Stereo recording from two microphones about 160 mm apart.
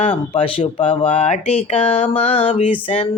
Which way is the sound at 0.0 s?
35° left (ahead or behind).